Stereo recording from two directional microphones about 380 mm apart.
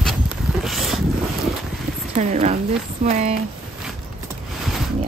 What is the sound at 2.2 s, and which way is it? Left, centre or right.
A woman's voice, centre.